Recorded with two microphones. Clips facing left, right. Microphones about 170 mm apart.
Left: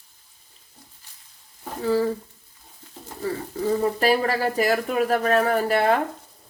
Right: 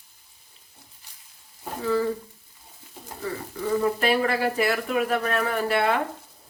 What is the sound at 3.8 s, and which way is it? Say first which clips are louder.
Speech: left 1 dB; 35° left (ahead or behind).